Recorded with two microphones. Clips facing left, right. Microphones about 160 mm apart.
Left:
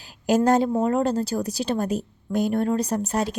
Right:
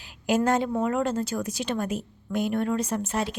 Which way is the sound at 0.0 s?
40° left (ahead or behind).